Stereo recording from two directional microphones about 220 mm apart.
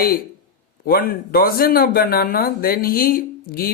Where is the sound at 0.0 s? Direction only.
40° left (ahead or behind).